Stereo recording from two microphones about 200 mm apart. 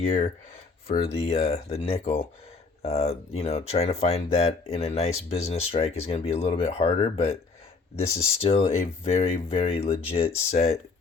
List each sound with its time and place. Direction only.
0.9 s speech: 30° left (ahead or behind)